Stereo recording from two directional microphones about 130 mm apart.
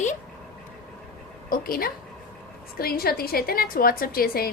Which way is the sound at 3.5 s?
90° left.